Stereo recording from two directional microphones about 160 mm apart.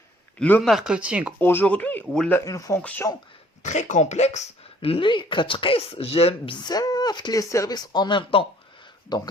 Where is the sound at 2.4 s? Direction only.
20° left (ahead or behind).